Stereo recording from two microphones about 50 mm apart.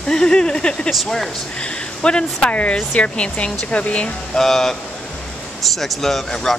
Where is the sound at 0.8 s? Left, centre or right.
Centre.